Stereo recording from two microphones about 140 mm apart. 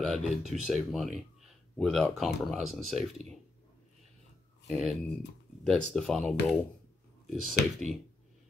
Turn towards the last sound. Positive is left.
turn(degrees=0)  # may be behind; listen again after turning